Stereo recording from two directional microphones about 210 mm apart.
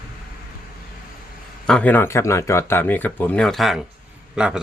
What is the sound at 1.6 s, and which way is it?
Speech, 5° left (ahead or behind).